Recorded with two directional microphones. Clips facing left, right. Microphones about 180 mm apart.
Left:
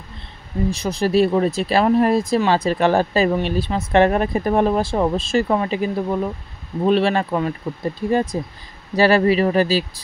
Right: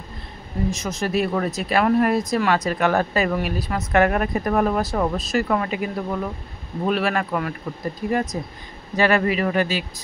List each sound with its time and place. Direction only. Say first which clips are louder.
0.7 s speech: left 5 dB; 30° left (ahead or behind)